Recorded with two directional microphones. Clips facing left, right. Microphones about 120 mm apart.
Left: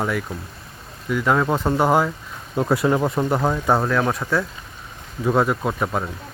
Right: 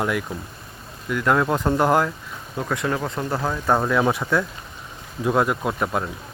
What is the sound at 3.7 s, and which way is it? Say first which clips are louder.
Speech: even; centre (ahead or behind).